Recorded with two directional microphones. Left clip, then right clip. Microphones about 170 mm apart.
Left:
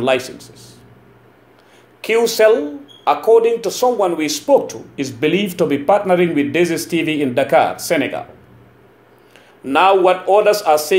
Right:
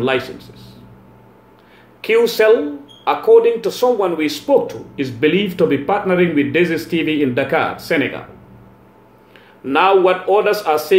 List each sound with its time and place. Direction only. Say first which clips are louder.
0.0 s speech: left 1 dB; 45° left (ahead or behind)
2.0 s speech: even; 40° left (ahead or behind)
9.7 s speech: left 1 dB; 40° left (ahead or behind)